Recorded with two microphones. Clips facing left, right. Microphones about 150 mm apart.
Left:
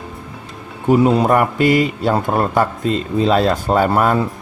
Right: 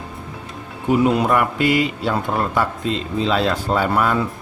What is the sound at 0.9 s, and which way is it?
Speech, 40° left (ahead or behind).